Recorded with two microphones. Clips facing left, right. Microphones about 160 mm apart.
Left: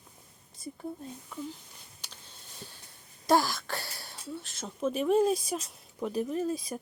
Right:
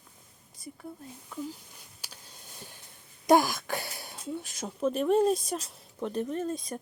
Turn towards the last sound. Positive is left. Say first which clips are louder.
# left 1 dB
turn(degrees=5)  # may be behind; listen again after turning